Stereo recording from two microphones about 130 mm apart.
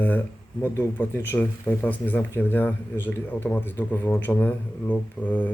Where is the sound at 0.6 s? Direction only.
15° left (ahead or behind).